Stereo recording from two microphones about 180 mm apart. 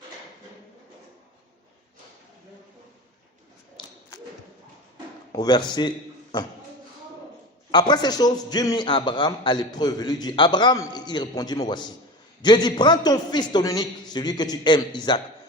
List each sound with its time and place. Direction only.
3.8 s a sound: 25° left (ahead or behind)
5.3 s a man's voice: 20° left (ahead or behind)
7.7 s a man's voice: 25° left (ahead or behind)